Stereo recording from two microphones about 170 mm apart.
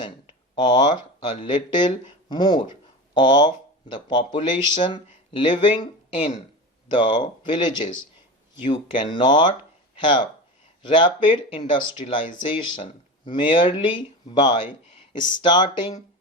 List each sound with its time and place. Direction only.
0.5 s speech: 25° left (ahead or behind)